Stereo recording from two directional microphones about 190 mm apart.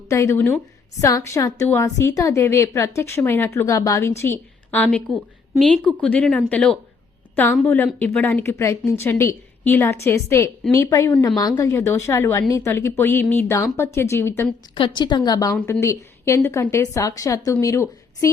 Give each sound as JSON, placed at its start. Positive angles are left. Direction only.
{"t": 0.1, "sound": "a woman's voice", "side_deg": 15}
{"t": 14.8, "sound": "a woman's voice", "side_deg": 25}